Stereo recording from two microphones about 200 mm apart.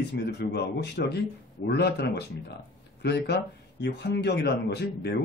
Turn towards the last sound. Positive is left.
turn(degrees=55)  # may be behind; listen again after turning